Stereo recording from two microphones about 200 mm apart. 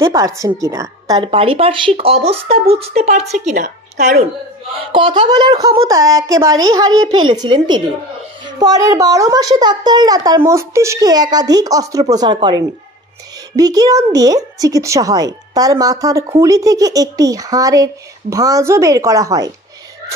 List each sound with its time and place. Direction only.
0.0 s a child's voice: 15° right (ahead or behind); by 4.1 s 35° right (ahead or behind)
4.9 s a child's voice: 25° right (ahead or behind)